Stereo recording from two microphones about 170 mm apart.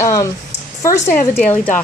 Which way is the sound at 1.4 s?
10° left (ahead or behind).